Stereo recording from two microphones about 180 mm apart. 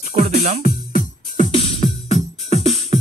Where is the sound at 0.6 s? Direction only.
55° left (ahead or behind).